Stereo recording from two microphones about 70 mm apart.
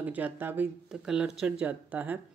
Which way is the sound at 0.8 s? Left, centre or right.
Centre.